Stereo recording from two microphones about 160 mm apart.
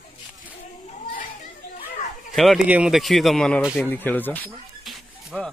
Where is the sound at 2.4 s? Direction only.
5° right (ahead or behind).